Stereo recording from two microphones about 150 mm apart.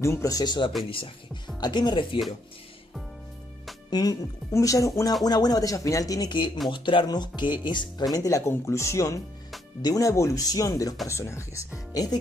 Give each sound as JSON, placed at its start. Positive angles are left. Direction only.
{"t": 0.0, "sound": "speech", "side_deg": 20}
{"t": 3.9, "sound": "speech", "side_deg": 25}